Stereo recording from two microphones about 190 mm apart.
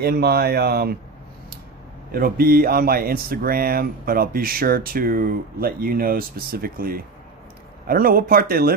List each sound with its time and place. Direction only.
0.0 s speech: 55° right (ahead or behind)
2.1 s speech: 50° right (ahead or behind)